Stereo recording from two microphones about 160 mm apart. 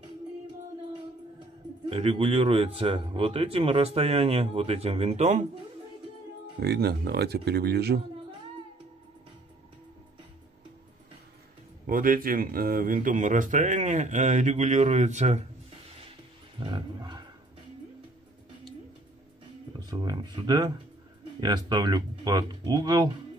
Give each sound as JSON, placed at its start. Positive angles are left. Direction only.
{"t": 1.9, "sound": "speech", "side_deg": -40}
{"t": 6.6, "sound": "speech", "side_deg": -90}
{"t": 11.8, "sound": "speech", "side_deg": -60}
{"t": 16.5, "sound": "roaring cats", "side_deg": -30}
{"t": 19.9, "sound": "speech", "side_deg": -30}